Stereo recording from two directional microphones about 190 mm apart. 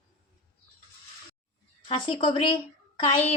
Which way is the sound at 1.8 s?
25° left (ahead or behind).